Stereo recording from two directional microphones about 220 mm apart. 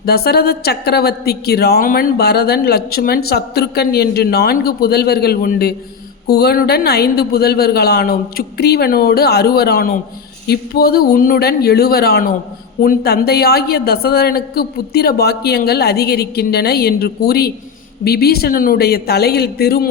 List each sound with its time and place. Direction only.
0.0 s a woman's voice: 45° left (ahead or behind)